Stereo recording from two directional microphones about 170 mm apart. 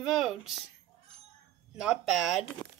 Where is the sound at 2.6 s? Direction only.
25° left (ahead or behind).